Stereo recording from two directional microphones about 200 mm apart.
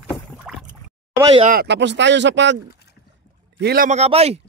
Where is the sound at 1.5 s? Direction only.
55° right (ahead or behind).